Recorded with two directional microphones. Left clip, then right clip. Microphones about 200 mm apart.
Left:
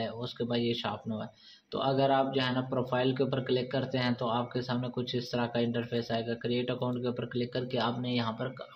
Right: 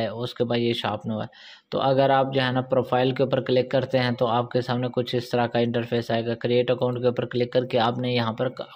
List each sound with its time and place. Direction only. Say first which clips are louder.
0.0 s speech: right 9 dB; 50° right (ahead or behind)